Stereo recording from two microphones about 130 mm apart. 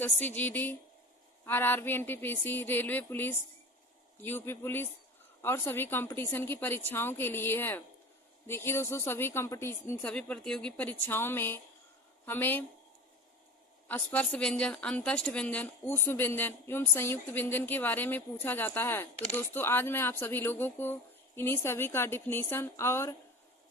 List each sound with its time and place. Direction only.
0.0 s a woman's voice: 15° left (ahead or behind)
13.8 s a woman's voice: 15° left (ahead or behind)